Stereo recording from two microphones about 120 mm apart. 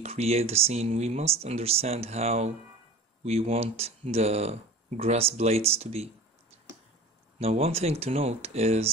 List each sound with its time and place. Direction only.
0.0 s speech: 60° right (ahead or behind)
7.3 s speech: 60° right (ahead or behind)